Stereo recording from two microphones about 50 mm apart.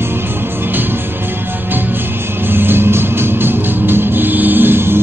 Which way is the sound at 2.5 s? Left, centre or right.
Right.